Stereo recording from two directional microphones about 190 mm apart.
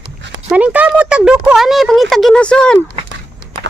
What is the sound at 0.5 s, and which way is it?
Speech, 5° right (ahead or behind).